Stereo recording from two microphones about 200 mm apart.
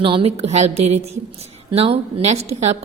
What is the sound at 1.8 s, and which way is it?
Speech, 30° right (ahead or behind).